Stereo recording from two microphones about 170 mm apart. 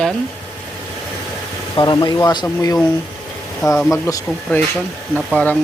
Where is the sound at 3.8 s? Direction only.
5° left (ahead or behind).